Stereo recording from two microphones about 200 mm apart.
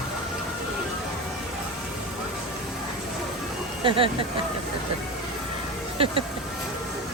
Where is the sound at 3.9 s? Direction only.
25° right (ahead or behind).